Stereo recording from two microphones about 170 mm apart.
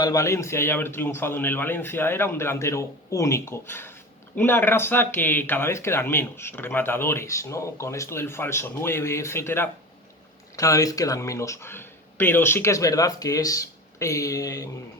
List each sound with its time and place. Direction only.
0.0 s a man's voice: 20° left (ahead or behind)